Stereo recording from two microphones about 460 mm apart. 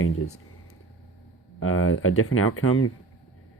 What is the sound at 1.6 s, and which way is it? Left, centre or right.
Speech, left.